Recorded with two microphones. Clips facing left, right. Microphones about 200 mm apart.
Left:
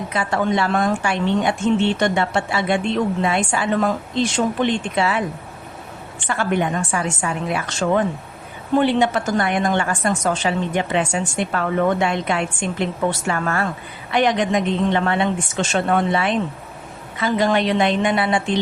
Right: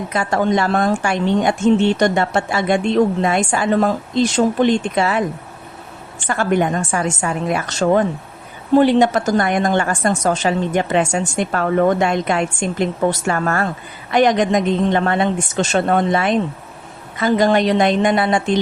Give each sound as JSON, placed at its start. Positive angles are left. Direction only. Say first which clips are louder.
{"t": 0.1, "sound": "a woman's voice", "louder": "right 3 dB", "side_deg": -45}